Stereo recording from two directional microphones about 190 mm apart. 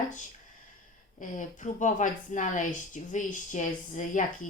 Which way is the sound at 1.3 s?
40° left (ahead or behind).